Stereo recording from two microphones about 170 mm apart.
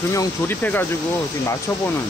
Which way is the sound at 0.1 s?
15° left (ahead or behind).